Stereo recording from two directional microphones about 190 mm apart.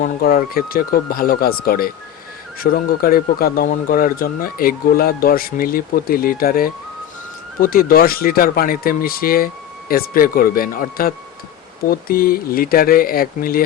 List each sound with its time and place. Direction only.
0.0 s speech: 50° left (ahead or behind)